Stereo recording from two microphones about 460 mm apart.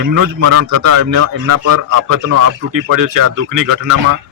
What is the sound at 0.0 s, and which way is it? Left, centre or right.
Speech, right.